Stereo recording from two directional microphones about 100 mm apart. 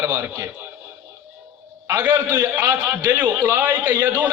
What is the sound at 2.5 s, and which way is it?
A man's voice, 20° right (ahead or behind).